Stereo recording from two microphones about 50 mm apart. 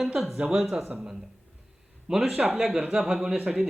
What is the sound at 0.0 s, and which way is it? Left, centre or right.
Speech, centre.